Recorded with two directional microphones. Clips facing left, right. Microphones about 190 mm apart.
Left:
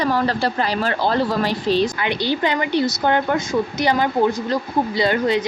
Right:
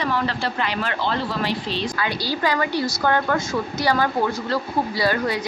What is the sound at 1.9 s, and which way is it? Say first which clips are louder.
A woman's voice: left 4 dB; 20° left (ahead or behind).